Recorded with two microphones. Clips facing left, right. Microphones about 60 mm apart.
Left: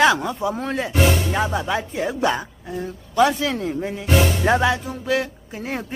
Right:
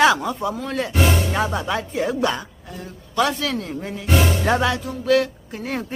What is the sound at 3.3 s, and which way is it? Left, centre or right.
A woman's voice, centre.